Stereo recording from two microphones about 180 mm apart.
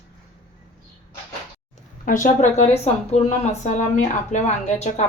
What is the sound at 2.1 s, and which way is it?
Speech, 45° left (ahead or behind).